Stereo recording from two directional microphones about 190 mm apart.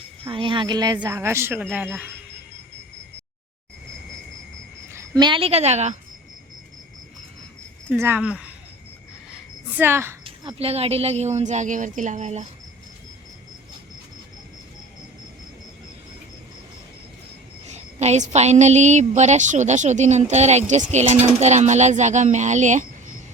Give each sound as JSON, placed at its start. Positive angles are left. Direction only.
{"t": 0.3, "sound": "speech", "side_deg": -25}
{"t": 4.9, "sound": "a woman's voice", "side_deg": -15}
{"t": 7.9, "sound": "speech", "side_deg": -10}
{"t": 9.7, "sound": "speech", "side_deg": -10}
{"t": 10.2, "sound": "a woman's voice", "side_deg": -30}
{"t": 17.7, "sound": "a woman's voice", "side_deg": -35}